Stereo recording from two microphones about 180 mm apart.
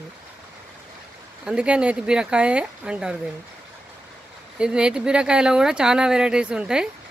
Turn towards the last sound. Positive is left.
turn(degrees=-5)  # may be behind; listen again after turning